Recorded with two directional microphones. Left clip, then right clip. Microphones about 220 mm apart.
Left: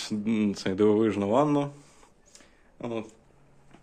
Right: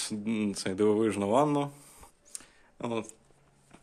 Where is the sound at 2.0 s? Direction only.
25° right (ahead or behind).